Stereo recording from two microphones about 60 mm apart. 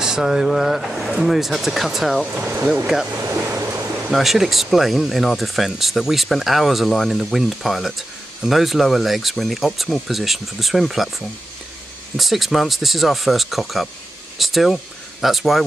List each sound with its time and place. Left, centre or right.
0.0 s speech: centre
2.2 s speech: right
3.2 s speech: right
4.1 s speech: centre